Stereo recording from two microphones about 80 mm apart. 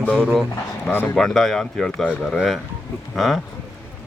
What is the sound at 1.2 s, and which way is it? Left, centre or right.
Speech, centre.